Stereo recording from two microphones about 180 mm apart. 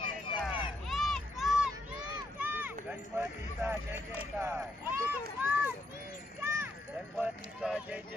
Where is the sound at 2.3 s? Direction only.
10° right (ahead or behind).